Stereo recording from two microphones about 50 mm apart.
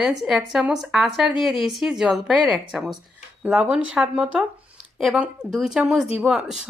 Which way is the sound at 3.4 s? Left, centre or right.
Centre.